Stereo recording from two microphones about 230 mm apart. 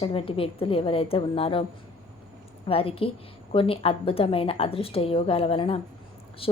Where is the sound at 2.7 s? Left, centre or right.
Left.